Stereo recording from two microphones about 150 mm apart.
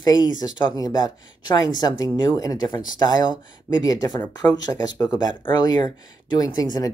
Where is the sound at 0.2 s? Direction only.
25° left (ahead or behind).